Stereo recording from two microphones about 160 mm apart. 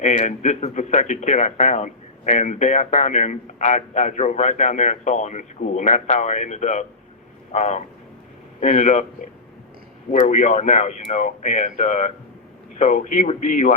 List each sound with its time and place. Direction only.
0.0 s a man's voice: 50° left (ahead or behind)
10.1 s a man's voice: 50° left (ahead or behind)